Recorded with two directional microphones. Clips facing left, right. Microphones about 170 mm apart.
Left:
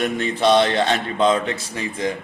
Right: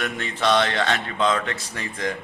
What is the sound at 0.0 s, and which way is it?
A man's voice, 20° left (ahead or behind).